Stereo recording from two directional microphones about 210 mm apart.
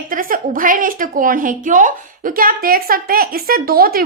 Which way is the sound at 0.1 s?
40° right (ahead or behind).